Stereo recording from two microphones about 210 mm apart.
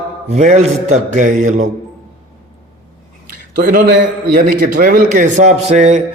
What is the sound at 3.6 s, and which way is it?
A man's voice, 40° right (ahead or behind).